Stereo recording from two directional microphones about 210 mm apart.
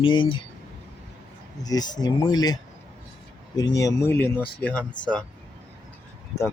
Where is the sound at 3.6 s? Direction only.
15° left (ahead or behind).